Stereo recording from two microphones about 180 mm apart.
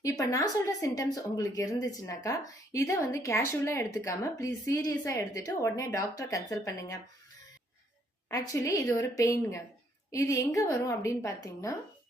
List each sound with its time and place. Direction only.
0.0 s speech: 20° left (ahead or behind)
8.3 s speech: 15° left (ahead or behind)